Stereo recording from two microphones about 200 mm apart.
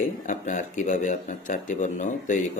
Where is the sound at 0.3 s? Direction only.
40° left (ahead or behind).